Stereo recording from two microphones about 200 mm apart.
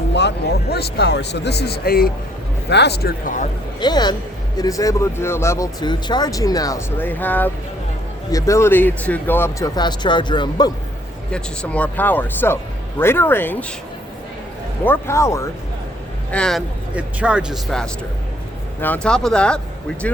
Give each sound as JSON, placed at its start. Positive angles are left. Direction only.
{"t": 0.1, "sound": "speech", "side_deg": 60}
{"t": 3.8, "sound": "speech", "side_deg": 20}
{"t": 11.3, "sound": "speech", "side_deg": 5}
{"t": 14.8, "sound": "speech", "side_deg": 15}
{"t": 16.3, "sound": "speech", "side_deg": 0}